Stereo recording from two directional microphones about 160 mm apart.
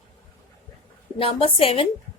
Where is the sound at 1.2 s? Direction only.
35° left (ahead or behind).